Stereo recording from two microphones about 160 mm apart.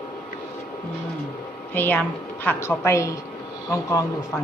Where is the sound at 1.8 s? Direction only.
10° left (ahead or behind).